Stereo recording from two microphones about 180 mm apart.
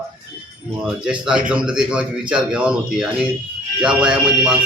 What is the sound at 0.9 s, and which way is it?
Speech, 5° right (ahead or behind).